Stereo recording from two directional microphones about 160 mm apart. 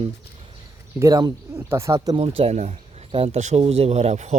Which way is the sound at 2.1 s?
35° right (ahead or behind).